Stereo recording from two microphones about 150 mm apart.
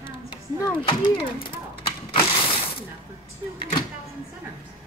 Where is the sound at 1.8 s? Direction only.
35° left (ahead or behind).